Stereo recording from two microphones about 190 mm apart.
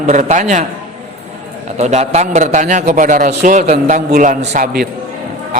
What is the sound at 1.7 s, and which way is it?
A man's voice, 35° right (ahead or behind).